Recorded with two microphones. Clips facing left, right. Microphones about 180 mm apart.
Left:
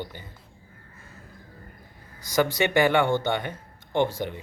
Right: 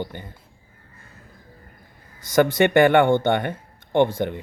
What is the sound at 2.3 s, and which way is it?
Speech, 55° right (ahead or behind).